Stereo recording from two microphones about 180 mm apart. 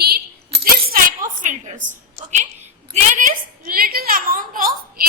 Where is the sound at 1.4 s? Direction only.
45° right (ahead or behind).